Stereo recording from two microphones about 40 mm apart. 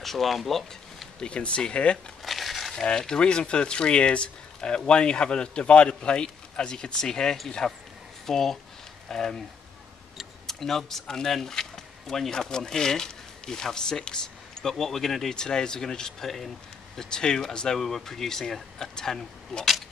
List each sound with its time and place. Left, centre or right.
0.0 s speech: centre
1.2 s speech: left
2.2 s crumpling: centre
2.7 s speech: left
10.4 s speech: centre